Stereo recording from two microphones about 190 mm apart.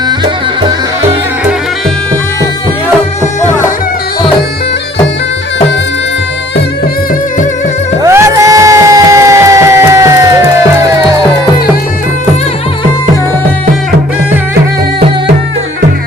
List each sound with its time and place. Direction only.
4.2 s bagpipes: 25° left (ahead or behind)
8.0 s music: 15° right (ahead or behind)